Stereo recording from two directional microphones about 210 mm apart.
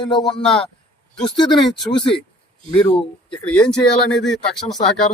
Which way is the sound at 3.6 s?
5° left (ahead or behind).